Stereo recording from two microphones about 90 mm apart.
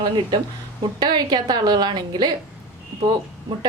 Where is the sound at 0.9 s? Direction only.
55° right (ahead or behind).